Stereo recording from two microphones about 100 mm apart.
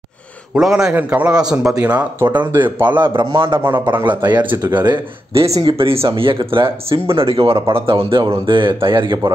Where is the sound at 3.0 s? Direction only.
55° right (ahead or behind).